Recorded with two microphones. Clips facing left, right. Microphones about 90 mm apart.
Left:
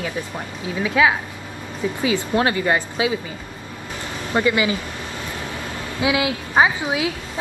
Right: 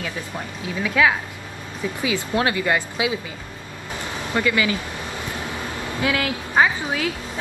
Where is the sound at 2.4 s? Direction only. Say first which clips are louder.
Even; 25° left (ahead or behind).